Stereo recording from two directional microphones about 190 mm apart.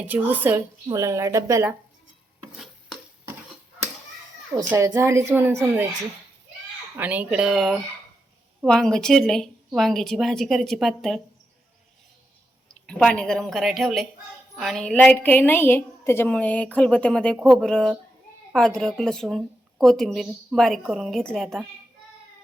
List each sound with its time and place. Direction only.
0.1 s speech: 10° right (ahead or behind)
4.7 s speech: 15° right (ahead or behind)
6.9 s a woman's voice: 10° right (ahead or behind)
12.9 s a woman's voice: 5° left (ahead or behind)